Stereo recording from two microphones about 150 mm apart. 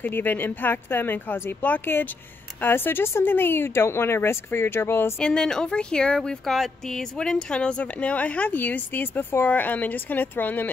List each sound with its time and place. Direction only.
0.0 s speech: 10° left (ahead or behind)
5.2 s speech: 5° left (ahead or behind)